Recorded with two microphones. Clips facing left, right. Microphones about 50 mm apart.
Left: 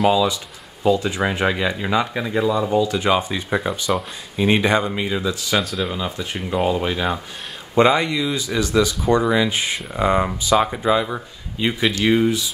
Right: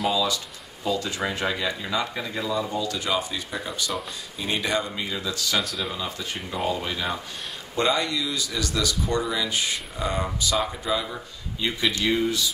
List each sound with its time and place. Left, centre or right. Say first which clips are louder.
0.8 s speech: left 8 dB; left
5.6 s speech: left 5 dB; centre
5.9 s speech: left 5 dB; left
6.5 s speech: left 7 dB; left
9.1 s speech: left 10 dB; left